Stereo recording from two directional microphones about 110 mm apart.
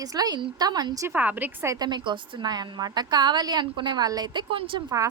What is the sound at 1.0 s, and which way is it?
Speech, 15° right (ahead or behind).